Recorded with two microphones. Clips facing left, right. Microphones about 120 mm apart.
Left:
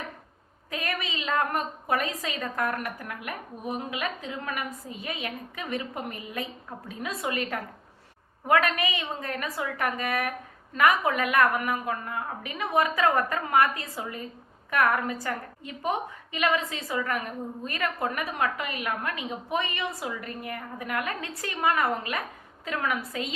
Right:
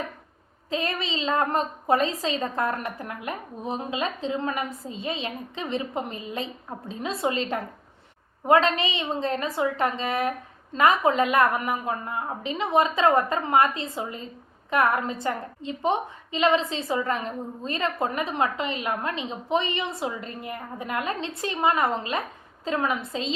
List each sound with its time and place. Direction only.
0.7 s a woman's voice: 25° right (ahead or behind)